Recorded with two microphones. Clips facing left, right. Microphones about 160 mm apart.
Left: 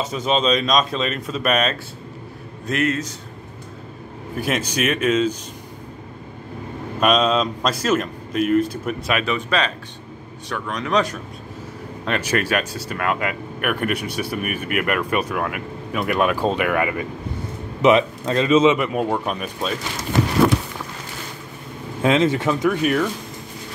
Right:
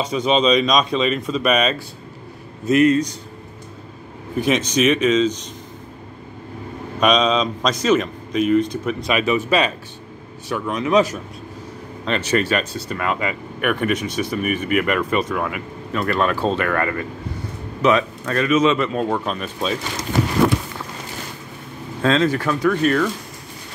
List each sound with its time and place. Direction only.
0.0 s speech: centre (ahead or behind)
4.4 s speech: 5° left (ahead or behind)
7.0 s speech: 5° left (ahead or behind)
12.0 s speech: 10° left (ahead or behind)
18.8 s speech: 10° left (ahead or behind)
22.0 s speech: 20° left (ahead or behind)